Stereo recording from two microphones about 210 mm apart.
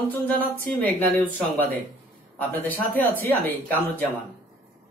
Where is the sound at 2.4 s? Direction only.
10° left (ahead or behind).